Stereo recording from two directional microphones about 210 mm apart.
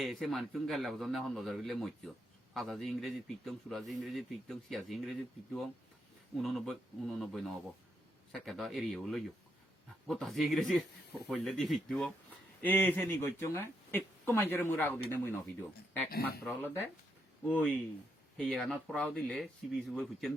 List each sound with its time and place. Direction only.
0.0 s a man's voice: centre (ahead or behind)
6.3 s a man's voice: centre (ahead or behind)
16.0 s speech: 50° left (ahead or behind)
16.4 s a man's voice: centre (ahead or behind)